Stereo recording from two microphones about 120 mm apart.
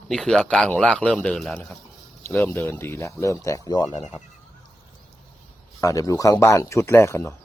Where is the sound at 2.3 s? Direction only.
20° left (ahead or behind); by 4.0 s 35° left (ahead or behind).